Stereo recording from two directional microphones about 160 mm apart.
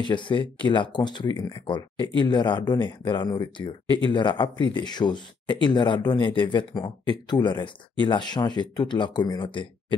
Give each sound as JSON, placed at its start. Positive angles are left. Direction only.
{"t": 0.0, "sound": "speech", "side_deg": 30}